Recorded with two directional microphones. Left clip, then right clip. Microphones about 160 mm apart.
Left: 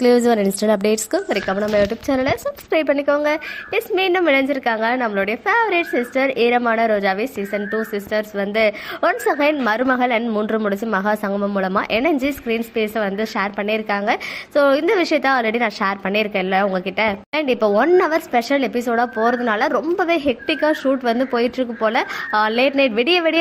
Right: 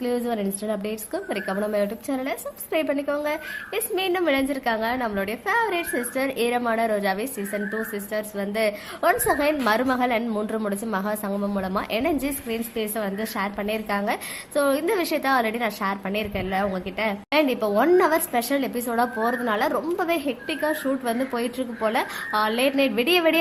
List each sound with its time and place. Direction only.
0.0 s a woman's voice: 40° left (ahead or behind)
1.3 s a woman's voice: 20° left (ahead or behind)